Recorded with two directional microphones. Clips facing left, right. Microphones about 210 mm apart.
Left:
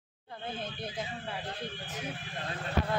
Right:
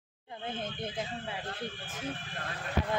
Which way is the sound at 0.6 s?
20° right (ahead or behind).